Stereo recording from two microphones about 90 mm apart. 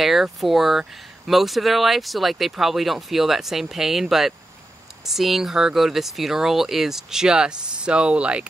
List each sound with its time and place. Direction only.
0.0 s speech: centre (ahead or behind)